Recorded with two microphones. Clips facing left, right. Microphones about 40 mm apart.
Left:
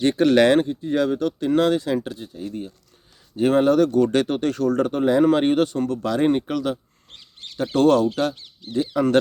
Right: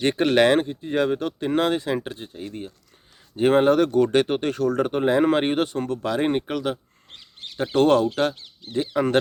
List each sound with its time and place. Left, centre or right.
0.0 s speech: right
7.1 s bird: centre
7.6 s speech: right
8.6 s speech: centre